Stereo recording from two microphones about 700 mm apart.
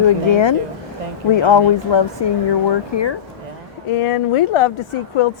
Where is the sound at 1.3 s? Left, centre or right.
Left.